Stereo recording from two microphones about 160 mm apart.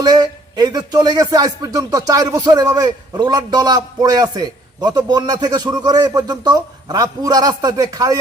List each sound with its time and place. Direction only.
0.0 s speech: 25° right (ahead or behind)